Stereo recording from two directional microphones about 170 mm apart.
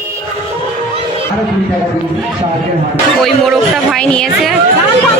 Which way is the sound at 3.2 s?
Centre (ahead or behind).